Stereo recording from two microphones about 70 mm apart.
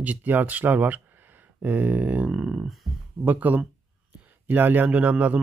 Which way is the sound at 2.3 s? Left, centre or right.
Centre.